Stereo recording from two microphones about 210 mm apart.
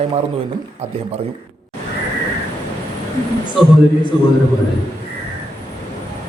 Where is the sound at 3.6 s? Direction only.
Centre (ahead or behind).